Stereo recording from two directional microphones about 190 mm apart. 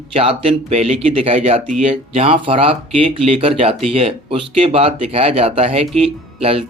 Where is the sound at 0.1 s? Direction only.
30° right (ahead or behind).